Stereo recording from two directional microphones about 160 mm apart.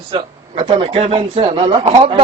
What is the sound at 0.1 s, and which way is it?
A man's voice, 30° right (ahead or behind).